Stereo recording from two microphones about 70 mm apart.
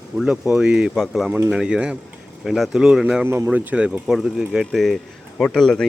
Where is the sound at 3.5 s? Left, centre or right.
Centre.